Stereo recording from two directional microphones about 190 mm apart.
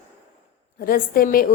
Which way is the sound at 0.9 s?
50° left (ahead or behind).